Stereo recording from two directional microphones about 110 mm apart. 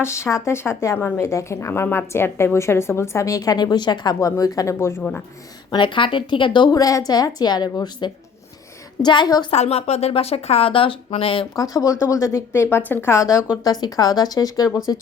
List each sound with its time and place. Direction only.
0.0 s a woman's voice: 25° left (ahead or behind)
5.7 s a woman's voice: 45° left (ahead or behind)
9.5 s speech: 70° left (ahead or behind); by 11.4 s 55° left (ahead or behind)
11.5 s a woman's voice: 30° left (ahead or behind)
12.6 s a woman's voice: 20° left (ahead or behind)
13.3 s a woman's voice: 35° left (ahead or behind)